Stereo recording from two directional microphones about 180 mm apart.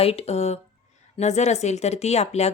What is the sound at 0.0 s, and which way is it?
Speech, 35° left (ahead or behind).